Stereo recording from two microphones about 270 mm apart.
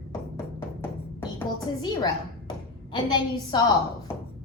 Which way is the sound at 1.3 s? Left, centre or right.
Centre.